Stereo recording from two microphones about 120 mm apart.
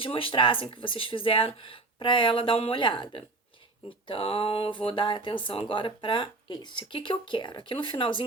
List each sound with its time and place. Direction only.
0.0 s speech: 50° left (ahead or behind)